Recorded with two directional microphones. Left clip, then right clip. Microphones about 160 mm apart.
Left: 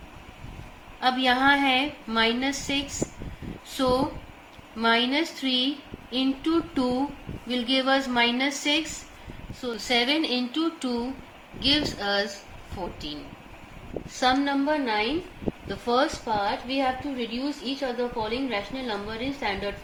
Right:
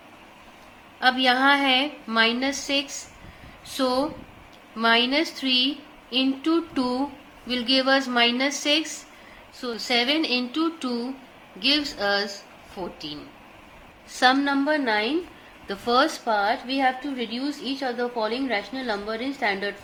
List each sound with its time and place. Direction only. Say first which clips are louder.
0.9 s a woman's voice: right 3 dB; 35° right (ahead or behind)
14.2 s a woman's voice: right 3 dB; 55° right (ahead or behind)